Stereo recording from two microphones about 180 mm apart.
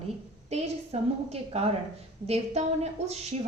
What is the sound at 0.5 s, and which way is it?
A woman's voice, 35° right (ahead or behind).